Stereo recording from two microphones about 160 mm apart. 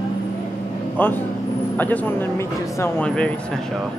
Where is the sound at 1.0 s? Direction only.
10° left (ahead or behind).